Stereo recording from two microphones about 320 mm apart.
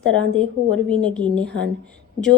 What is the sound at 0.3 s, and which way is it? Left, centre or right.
Speech, centre.